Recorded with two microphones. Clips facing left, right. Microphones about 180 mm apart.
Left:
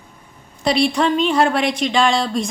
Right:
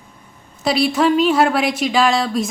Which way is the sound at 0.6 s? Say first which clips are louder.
Right 1 dB; centre (ahead or behind).